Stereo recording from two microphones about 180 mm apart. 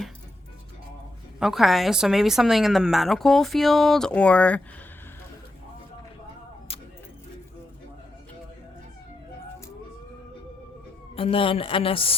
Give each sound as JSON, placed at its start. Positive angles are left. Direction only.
{"t": 1.4, "sound": "a woman's voice", "side_deg": 0}
{"t": 11.1, "sound": "speech", "side_deg": 30}